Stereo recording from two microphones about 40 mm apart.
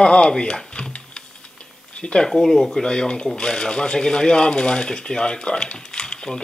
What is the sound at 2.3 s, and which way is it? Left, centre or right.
Speech, centre.